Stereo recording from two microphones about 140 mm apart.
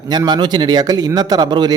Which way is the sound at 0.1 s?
30° right (ahead or behind).